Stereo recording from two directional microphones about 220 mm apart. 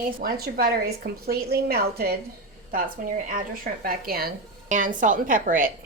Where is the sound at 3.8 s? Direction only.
40° right (ahead or behind).